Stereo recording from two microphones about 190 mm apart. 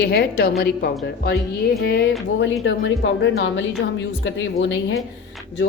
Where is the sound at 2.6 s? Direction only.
75° left (ahead or behind).